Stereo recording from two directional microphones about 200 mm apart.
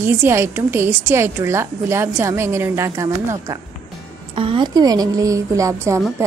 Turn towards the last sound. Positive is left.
turn(degrees=-15)  # may be behind; listen again after turning